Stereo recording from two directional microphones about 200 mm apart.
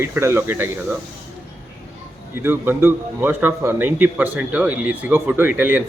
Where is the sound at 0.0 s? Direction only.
15° right (ahead or behind).